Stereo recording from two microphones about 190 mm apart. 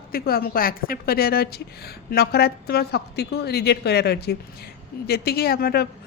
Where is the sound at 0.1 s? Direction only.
50° left (ahead or behind).